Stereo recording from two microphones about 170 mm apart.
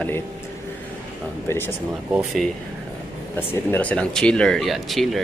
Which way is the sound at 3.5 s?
10° left (ahead or behind).